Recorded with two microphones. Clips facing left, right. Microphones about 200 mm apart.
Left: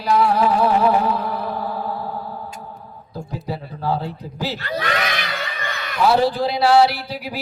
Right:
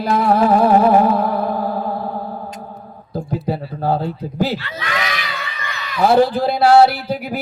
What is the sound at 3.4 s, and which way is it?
Speech, 55° right (ahead or behind).